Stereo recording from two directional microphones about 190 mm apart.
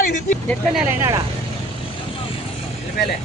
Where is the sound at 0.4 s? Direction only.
Centre (ahead or behind).